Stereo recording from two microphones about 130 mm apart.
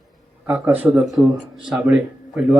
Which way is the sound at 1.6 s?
10° right (ahead or behind).